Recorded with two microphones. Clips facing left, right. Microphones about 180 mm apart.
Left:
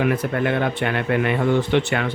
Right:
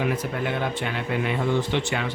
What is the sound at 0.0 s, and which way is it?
Speech, 60° left (ahead or behind).